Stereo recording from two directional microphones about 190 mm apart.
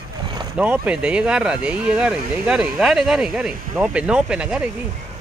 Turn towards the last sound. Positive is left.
turn(degrees=-5)  # may be behind; listen again after turning